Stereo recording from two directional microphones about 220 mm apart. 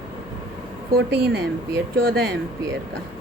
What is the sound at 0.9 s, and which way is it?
A woman's voice, 50° right (ahead or behind).